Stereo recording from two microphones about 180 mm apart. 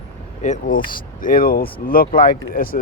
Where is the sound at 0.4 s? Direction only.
45° left (ahead or behind).